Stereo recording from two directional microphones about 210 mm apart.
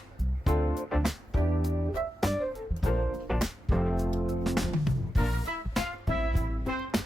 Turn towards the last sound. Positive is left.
turn(degrees=0)  # may be behind; listen again after turning